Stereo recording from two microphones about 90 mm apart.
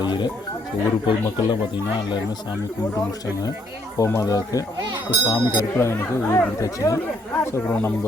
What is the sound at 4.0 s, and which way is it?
Speech, 40° left (ahead or behind).